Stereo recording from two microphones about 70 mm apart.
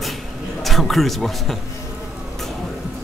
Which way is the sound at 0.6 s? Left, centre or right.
Centre.